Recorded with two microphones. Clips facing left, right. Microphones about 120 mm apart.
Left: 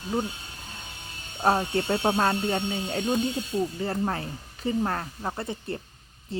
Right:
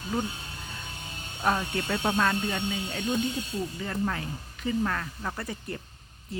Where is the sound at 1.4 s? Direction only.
35° left (ahead or behind).